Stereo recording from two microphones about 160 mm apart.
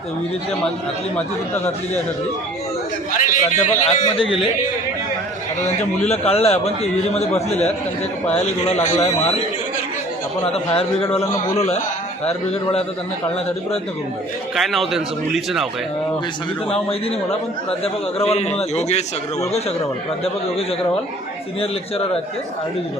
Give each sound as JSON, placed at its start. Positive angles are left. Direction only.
{"t": 3.2, "sound": "speech", "side_deg": 50}
{"t": 6.1, "sound": "a man's voice", "side_deg": 40}
{"t": 14.5, "sound": "a man's voice", "side_deg": 0}
{"t": 16.6, "sound": "a man's voice", "side_deg": 40}